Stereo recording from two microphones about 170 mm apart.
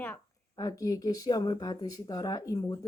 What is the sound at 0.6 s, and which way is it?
Speech, 20° left (ahead or behind).